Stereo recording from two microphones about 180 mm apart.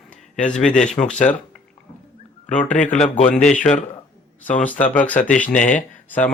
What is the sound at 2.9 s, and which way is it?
Speech, 35° left (ahead or behind).